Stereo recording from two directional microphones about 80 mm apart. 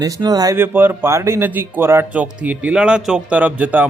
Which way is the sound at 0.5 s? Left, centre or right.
Right.